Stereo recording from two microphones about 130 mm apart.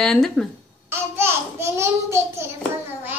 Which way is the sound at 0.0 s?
Centre (ahead or behind).